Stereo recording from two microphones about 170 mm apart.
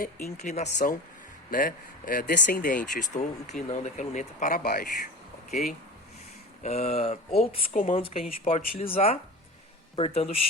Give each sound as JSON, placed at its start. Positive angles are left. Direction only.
{"t": 0.0, "sound": "speech", "side_deg": 60}
{"t": 0.5, "sound": "speech", "side_deg": 45}
{"t": 1.5, "sound": "speech", "side_deg": 55}
{"t": 6.6, "sound": "speech", "side_deg": 40}